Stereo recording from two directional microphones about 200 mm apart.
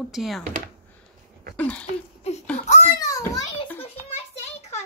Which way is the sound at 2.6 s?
35° left (ahead or behind).